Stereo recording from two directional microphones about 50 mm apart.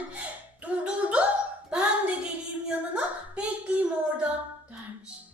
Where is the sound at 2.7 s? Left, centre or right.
Right.